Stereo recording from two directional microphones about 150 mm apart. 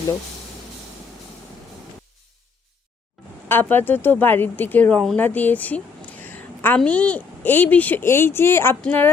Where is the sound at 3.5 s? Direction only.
15° left (ahead or behind).